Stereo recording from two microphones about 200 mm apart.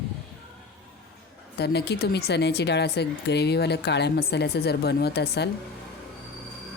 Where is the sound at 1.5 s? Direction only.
55° left (ahead or behind).